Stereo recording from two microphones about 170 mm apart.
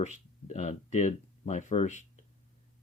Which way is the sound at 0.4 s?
45° left (ahead or behind).